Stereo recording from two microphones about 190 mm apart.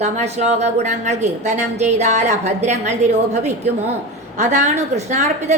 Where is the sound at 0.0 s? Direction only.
35° right (ahead or behind).